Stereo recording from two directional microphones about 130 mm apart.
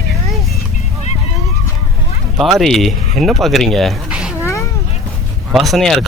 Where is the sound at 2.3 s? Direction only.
Centre (ahead or behind).